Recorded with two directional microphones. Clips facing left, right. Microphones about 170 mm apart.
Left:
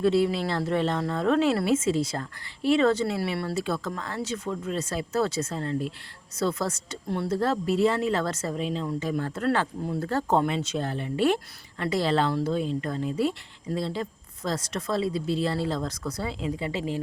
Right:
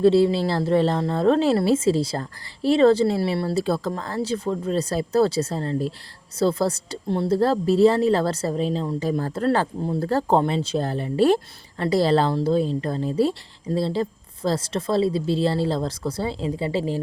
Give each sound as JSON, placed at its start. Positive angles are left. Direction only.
{"t": 0.0, "sound": "a woman's voice", "side_deg": -30}